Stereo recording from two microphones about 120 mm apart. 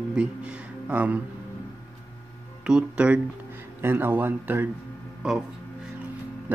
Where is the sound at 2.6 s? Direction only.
10° right (ahead or behind).